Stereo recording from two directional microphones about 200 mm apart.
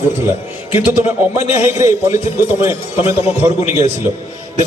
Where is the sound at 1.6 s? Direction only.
10° right (ahead or behind).